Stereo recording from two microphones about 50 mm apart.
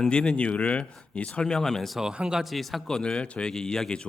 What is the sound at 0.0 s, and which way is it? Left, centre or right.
Speech, centre.